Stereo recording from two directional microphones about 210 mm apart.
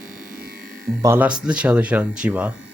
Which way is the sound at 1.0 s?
10° right (ahead or behind).